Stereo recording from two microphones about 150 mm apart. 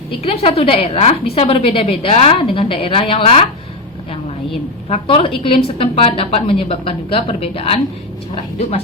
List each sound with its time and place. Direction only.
0.1 s a woman's voice: 40° left (ahead or behind)
4.9 s a woman's voice: 40° left (ahead or behind)